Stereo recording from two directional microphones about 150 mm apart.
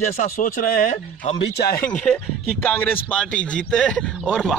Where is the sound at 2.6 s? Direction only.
10° left (ahead or behind).